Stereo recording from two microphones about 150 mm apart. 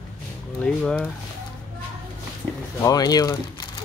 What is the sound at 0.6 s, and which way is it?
Speech, 5° left (ahead or behind).